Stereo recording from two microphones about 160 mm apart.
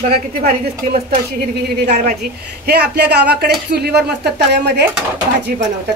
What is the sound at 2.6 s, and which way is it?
Speech, 85° right.